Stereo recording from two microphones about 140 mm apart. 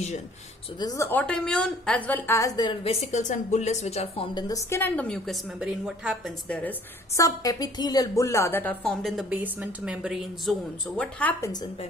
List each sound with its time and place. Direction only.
0.7 s a woman's voice: 25° left (ahead or behind)
2.8 s a woman's voice: 50° left (ahead or behind)
4.3 s a woman's voice: 30° left (ahead or behind); by 6.3 s 5° right (ahead or behind)
7.2 s a woman's voice: 25° left (ahead or behind)
9.3 s a woman's voice: 10° right (ahead or behind)
11.0 s a woman's voice: 10° left (ahead or behind)